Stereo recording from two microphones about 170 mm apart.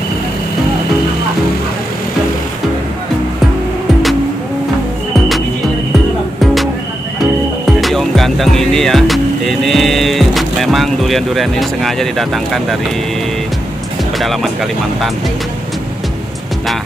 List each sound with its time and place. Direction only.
6.4 s music: centre (ahead or behind)
14.1 s speech: centre (ahead or behind)